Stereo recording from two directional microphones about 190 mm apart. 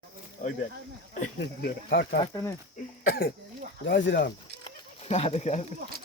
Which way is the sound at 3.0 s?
50° left (ahead or behind).